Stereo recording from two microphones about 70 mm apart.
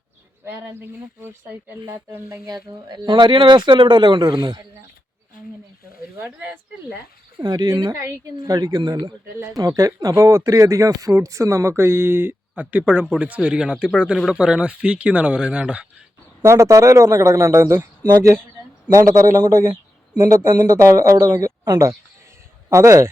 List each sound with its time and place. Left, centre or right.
0.4 s speech: right
3.1 s a man's voice: right
6.2 s speech: centre
7.3 s speech: right
9.6 s speech: right; by 15.9 s centre
16.4 s speech: right
21.6 s speech: right
22.7 s speech: right